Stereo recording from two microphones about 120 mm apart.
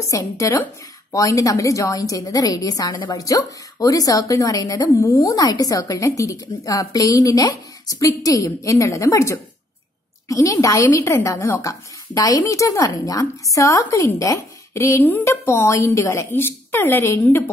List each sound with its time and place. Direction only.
0.0 s a woman's voice: 25° left (ahead or behind)